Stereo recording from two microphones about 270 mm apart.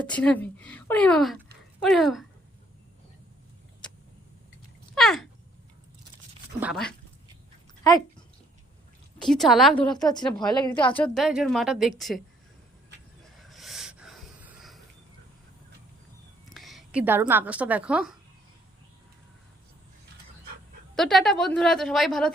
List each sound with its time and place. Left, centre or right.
0.0 s speech: centre
4.9 s a sound: centre
6.6 s speech: centre
9.2 s speech: centre
9.7 s a woman's voice: centre
13.3 s wheeze: centre
16.5 s a woman's voice: centre
20.9 s speech: centre